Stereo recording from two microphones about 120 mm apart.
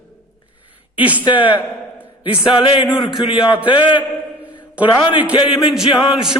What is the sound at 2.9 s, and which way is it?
Speech, centre (ahead or behind).